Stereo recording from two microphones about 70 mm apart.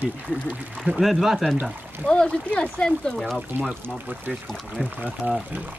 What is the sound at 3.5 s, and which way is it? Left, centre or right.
Speech, right.